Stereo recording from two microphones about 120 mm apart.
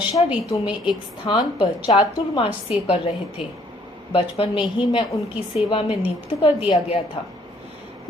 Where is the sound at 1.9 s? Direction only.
55° left (ahead or behind).